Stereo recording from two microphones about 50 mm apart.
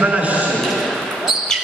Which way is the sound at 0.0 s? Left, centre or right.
Right.